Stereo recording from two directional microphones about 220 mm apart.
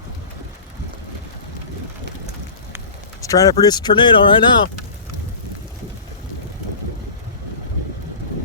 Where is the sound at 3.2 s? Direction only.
15° left (ahead or behind).